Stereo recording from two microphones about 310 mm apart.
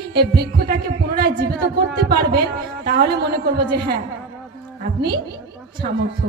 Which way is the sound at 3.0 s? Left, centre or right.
Right.